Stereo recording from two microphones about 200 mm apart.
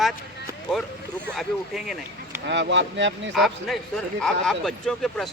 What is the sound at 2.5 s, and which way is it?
Speech, 60° right (ahead or behind).